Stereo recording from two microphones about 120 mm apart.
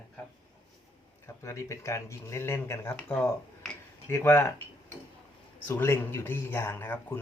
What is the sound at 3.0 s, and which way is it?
Speech, 10° left (ahead or behind).